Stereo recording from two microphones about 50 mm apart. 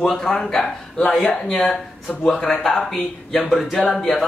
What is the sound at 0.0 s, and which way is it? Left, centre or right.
A man's voice, centre.